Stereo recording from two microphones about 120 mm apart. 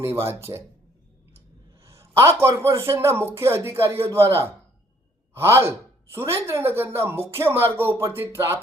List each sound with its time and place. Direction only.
0.0 s speech: 20° right (ahead or behind)
1.8 s a man's voice: 25° right (ahead or behind)